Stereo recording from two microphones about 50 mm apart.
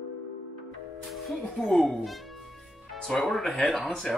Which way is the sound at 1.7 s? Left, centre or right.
Centre.